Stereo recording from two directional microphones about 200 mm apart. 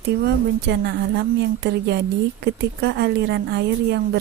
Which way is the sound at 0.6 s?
60° right (ahead or behind).